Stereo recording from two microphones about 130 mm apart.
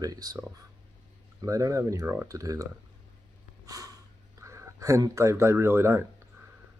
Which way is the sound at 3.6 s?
25° right (ahead or behind).